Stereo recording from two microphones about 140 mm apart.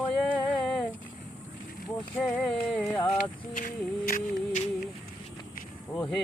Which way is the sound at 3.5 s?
70° left (ahead or behind).